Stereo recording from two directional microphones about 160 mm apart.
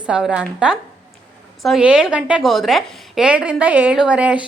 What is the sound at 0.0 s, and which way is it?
A woman's voice, 5° right (ahead or behind).